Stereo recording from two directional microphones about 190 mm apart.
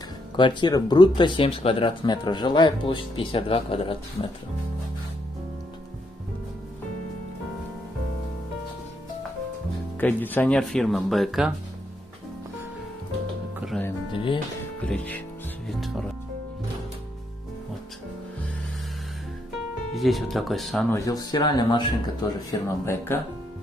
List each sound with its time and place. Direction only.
0.4 s speech: 25° left (ahead or behind)
9.9 s speech: 10° left (ahead or behind)
13.7 s music: 5° left (ahead or behind)
14.1 s music: 25° left (ahead or behind)
14.9 s speech: 10° left (ahead or behind)
15.8 s music: centre (ahead or behind)
19.9 s speech: centre (ahead or behind)
20.9 s speech: 20° left (ahead or behind)